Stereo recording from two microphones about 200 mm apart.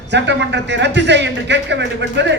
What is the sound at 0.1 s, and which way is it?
A man's voice, 60° right (ahead or behind).